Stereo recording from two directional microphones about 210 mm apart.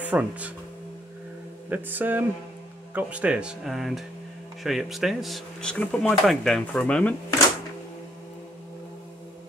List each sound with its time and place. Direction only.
0.0 s speech: 5° right (ahead or behind)
1.7 s a sound: 10° right (ahead or behind)
2.9 s speech: 5° right (ahead or behind)